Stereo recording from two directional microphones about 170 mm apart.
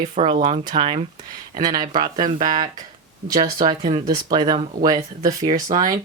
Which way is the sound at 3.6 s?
30° right (ahead or behind).